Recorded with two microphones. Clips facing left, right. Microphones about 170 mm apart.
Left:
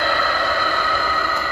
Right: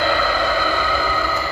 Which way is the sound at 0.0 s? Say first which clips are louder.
Right 2 dB; 50° left (ahead or behind).